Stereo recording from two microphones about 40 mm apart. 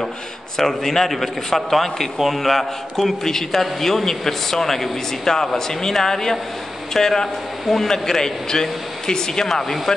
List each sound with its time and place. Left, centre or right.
0.6 s a man's voice: centre